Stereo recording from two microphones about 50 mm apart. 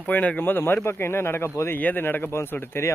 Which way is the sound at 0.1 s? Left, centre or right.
Left.